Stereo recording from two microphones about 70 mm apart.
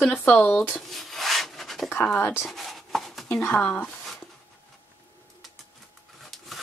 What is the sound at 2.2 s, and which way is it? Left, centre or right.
Speech, left.